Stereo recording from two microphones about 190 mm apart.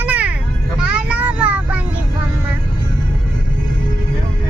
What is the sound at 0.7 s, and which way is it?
Vehicle, 5° right (ahead or behind).